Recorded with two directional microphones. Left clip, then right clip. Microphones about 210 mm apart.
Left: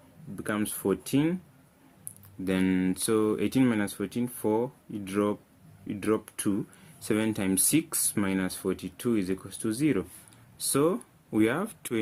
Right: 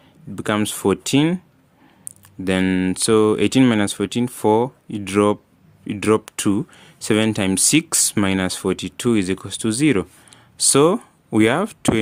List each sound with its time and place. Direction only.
0.3 s speech: 50° right (ahead or behind)
2.4 s speech: 40° right (ahead or behind)